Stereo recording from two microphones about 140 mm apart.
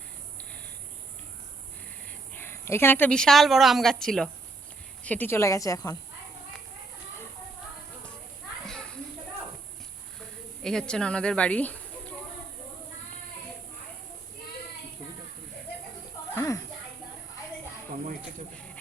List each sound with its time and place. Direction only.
2.0 s speech: 15° left (ahead or behind)
8.6 s children playing: 5° left (ahead or behind)
10.6 s a woman's voice: 5° left (ahead or behind)
16.3 s a sound: 20° left (ahead or behind)